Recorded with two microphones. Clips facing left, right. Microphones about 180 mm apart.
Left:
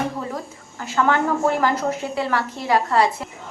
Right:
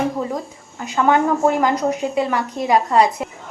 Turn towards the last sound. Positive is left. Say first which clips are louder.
# right 3 dB
turn(degrees=-15)  # may be behind; listen again after turning